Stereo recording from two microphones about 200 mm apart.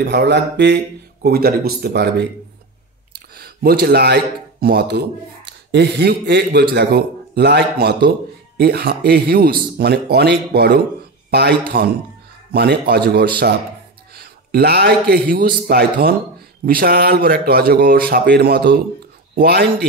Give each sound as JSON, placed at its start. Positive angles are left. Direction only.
{"t": 0.0, "sound": "a man's voice", "side_deg": -55}
{"t": 3.3, "sound": "a man's voice", "side_deg": -50}
{"t": 14.1, "sound": "a man's voice", "side_deg": -55}